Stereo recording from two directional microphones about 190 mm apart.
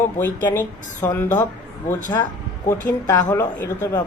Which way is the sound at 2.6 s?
15° left (ahead or behind).